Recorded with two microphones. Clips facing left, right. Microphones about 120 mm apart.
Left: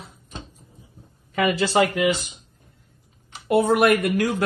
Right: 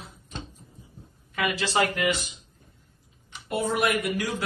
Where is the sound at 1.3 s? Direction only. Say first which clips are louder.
Left 6 dB; 30° left (ahead or behind).